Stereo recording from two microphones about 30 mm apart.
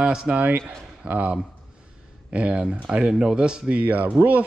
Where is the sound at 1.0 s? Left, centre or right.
Right.